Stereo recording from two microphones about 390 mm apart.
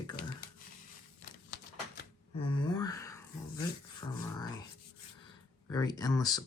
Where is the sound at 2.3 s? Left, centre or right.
Centre.